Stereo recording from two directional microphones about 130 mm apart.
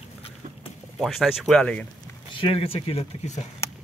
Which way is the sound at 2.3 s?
45° left (ahead or behind).